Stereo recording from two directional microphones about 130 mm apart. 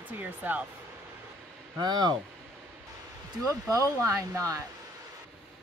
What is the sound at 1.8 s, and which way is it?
Speech, 35° right (ahead or behind).